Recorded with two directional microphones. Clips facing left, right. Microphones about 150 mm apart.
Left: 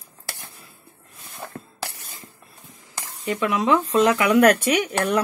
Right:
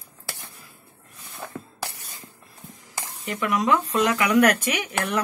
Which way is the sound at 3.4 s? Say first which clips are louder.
Left 2 dB; 30° left (ahead or behind).